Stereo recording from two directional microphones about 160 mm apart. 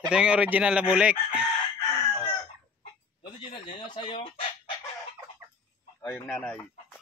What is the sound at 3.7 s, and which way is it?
Speech, 30° left (ahead or behind).